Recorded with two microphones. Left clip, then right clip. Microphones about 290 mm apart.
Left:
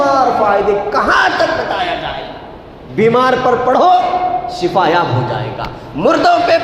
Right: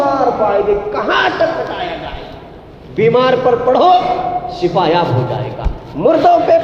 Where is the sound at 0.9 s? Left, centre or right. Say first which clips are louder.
Left 5 dB; left.